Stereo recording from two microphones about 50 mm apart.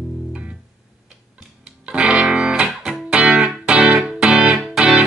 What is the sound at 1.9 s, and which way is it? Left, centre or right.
Music, centre.